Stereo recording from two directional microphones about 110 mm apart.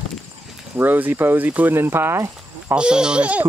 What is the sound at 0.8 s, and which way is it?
Speech, 15° right (ahead or behind).